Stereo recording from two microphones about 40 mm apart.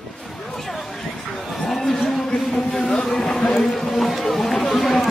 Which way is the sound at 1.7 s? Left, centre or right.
Centre.